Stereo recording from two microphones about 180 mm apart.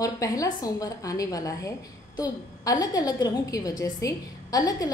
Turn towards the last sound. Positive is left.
turn(degrees=20)  # may be behind; listen again after turning